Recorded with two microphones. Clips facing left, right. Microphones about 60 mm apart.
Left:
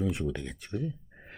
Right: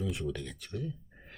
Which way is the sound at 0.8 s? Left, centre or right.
Left.